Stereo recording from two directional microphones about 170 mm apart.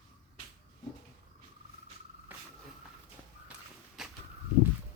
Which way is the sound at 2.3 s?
10° right (ahead or behind).